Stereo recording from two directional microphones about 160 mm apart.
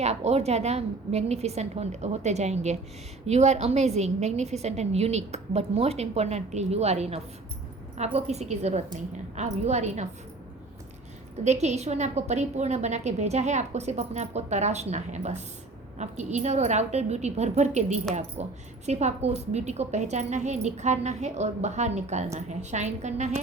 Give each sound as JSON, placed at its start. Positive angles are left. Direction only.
{"t": 0.0, "sound": "a woman's voice", "side_deg": -40}
{"t": 11.4, "sound": "a woman's voice", "side_deg": -45}